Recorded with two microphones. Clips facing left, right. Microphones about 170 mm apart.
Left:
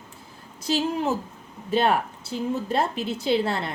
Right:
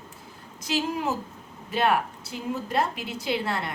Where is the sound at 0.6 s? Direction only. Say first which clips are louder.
Left 3 dB; 30° left (ahead or behind).